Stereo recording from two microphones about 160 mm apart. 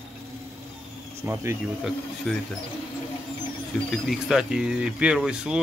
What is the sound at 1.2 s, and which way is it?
Speech, 15° right (ahead or behind).